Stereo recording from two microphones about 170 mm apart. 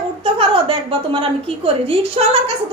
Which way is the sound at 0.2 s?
30° right (ahead or behind).